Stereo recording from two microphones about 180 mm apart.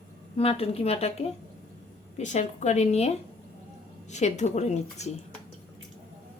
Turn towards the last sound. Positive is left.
turn(degrees=40)  # may be behind; listen again after turning